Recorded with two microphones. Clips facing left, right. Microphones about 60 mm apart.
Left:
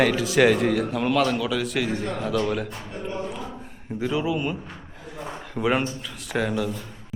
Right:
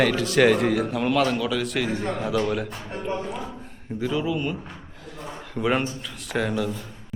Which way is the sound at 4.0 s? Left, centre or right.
Centre.